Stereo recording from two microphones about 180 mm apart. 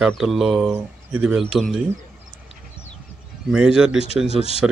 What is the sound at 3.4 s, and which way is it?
Speech, 5° right (ahead or behind).